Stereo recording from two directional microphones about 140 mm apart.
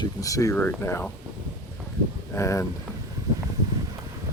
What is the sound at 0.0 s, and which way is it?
Speech, 25° left (ahead or behind).